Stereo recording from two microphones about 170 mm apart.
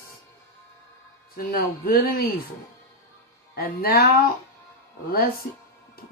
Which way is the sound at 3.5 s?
65° left (ahead or behind).